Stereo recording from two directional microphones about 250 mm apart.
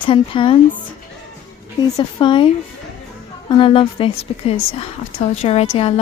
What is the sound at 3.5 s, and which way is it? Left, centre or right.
Speech, left.